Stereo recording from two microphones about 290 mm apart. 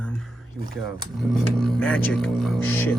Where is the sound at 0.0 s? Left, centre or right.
Centre.